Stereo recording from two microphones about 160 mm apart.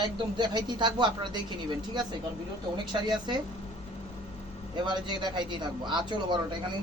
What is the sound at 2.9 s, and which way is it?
Speech, 25° right (ahead or behind).